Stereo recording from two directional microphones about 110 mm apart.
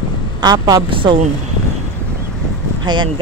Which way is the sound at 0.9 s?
50° right (ahead or behind).